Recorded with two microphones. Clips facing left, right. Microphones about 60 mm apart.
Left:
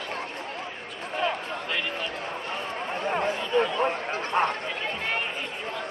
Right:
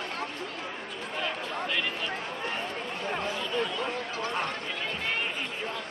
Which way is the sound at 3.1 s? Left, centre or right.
Left.